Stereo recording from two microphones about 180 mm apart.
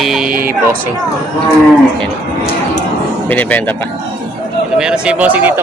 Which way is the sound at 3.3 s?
10° left (ahead or behind).